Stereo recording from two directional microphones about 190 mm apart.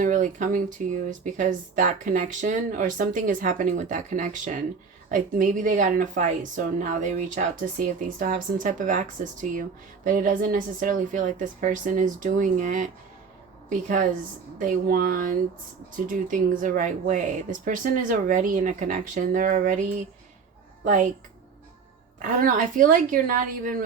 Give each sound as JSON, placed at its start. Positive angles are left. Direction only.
{"t": 0.0, "sound": "a woman's voice", "side_deg": -40}
{"t": 22.2, "sound": "speech", "side_deg": -45}